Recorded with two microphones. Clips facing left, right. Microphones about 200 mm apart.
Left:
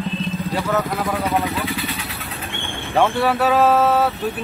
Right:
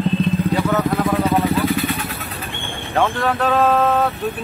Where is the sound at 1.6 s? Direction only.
50° right (ahead or behind).